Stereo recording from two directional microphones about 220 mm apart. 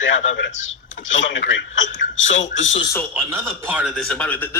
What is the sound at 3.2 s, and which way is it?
Speech, 10° right (ahead or behind).